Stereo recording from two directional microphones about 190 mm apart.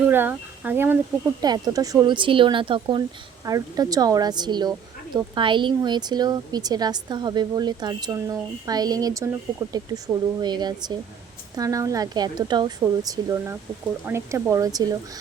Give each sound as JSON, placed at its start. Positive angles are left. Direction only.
{"t": 0.1, "sound": "speech", "side_deg": -10}
{"t": 1.4, "sound": "speech", "side_deg": -20}